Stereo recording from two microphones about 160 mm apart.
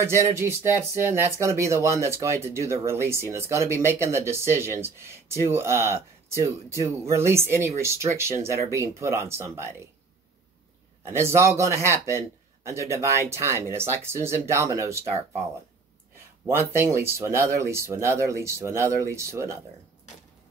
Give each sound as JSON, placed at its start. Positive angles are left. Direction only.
{"t": 0.0, "sound": "speech", "side_deg": -15}
{"t": 11.1, "sound": "speech", "side_deg": -15}
{"t": 16.4, "sound": "speech", "side_deg": -15}